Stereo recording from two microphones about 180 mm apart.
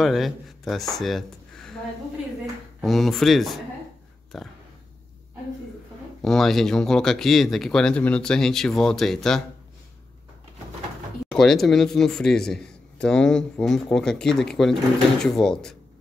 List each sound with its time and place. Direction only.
0.0 s speech: centre (ahead or behind)
2.8 s a man's voice: centre (ahead or behind)
6.2 s a man's voice: centre (ahead or behind)
11.3 s a man's voice: centre (ahead or behind)